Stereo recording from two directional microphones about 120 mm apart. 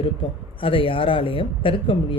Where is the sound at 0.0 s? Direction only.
50° left (ahead or behind).